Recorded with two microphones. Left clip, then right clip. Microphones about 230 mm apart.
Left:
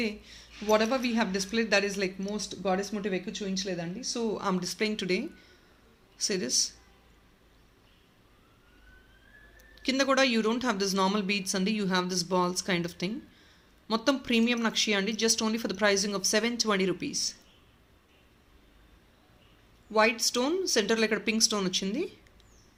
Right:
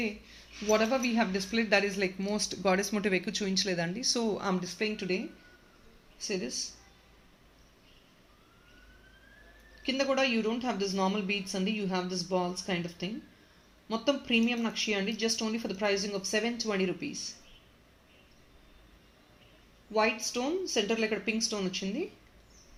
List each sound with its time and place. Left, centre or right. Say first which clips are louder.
0.0 s speech: left 2 dB; centre
2.2 s speech: right 2 dB; centre
4.3 s speech: left 1 dB; centre
4.6 s speech: left 3 dB; left
6.2 s speech: left 6 dB; left
9.8 s speech: left 3 dB; left
19.9 s speech: left 4 dB; left